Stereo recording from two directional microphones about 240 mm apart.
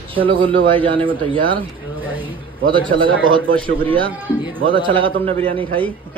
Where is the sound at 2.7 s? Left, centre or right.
Right.